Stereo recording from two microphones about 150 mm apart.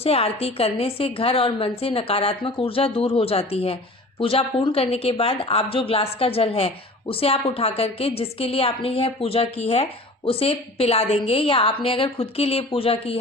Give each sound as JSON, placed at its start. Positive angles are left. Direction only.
{"t": 0.0, "sound": "speech", "side_deg": 40}